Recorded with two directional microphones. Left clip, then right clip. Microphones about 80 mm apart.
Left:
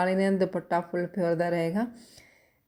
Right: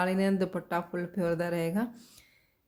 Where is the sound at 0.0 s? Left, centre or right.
Left.